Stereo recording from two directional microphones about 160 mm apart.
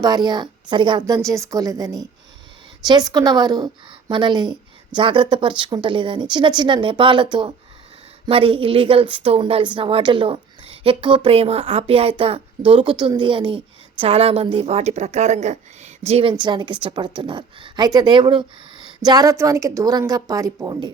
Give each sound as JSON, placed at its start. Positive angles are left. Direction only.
{"t": 0.0, "sound": "a woman's voice", "side_deg": -25}
{"t": 16.3, "sound": "a woman's voice", "side_deg": -25}